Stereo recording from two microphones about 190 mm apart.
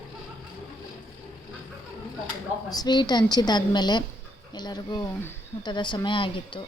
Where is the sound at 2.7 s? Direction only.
20° left (ahead or behind).